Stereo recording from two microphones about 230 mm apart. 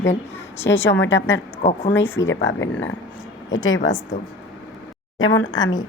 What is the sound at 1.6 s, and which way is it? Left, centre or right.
Speech, left.